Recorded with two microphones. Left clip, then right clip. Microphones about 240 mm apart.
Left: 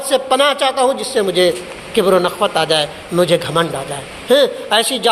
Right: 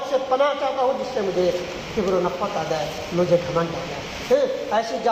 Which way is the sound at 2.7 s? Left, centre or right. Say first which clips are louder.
Left 8 dB; left.